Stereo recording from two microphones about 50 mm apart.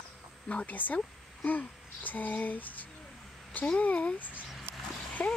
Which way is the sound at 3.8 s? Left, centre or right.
Left.